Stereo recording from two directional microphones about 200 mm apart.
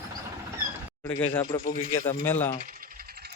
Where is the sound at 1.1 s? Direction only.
10° left (ahead or behind).